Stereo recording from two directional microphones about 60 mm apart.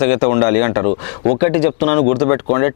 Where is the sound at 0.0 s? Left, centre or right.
Left.